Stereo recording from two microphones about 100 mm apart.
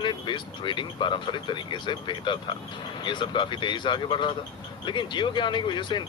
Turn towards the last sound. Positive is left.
turn(degrees=50)  # may be behind; listen again after turning